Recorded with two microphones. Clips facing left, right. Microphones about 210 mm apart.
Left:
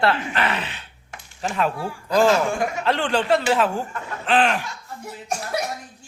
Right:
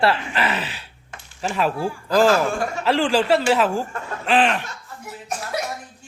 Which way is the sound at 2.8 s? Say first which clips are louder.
Right 6 dB; 5° right (ahead or behind).